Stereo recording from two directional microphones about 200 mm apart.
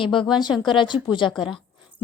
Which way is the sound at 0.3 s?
20° left (ahead or behind).